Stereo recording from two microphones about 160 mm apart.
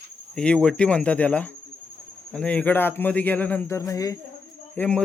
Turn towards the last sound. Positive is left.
turn(degrees=5)  # may be behind; listen again after turning